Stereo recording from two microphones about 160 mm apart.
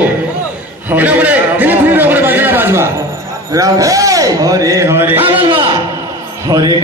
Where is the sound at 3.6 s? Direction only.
20° right (ahead or behind).